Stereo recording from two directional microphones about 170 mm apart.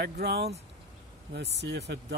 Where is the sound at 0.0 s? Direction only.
75° right (ahead or behind).